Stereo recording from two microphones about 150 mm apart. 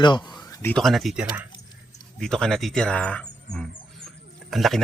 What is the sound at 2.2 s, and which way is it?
Speech, 5° left (ahead or behind).